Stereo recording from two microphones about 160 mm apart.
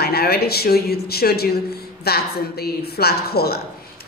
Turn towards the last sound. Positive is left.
turn(degrees=80)